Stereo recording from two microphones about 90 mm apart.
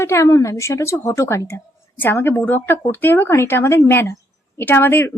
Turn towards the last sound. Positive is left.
turn(degrees=25)  # may be behind; listen again after turning